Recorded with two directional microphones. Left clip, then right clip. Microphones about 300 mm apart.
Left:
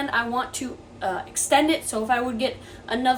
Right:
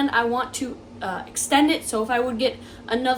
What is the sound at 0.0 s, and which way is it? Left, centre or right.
A woman's voice, centre.